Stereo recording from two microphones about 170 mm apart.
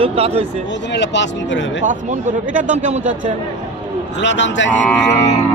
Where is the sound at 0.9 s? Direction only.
90° left.